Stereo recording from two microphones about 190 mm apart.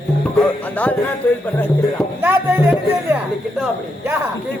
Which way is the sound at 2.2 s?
10° right (ahead or behind).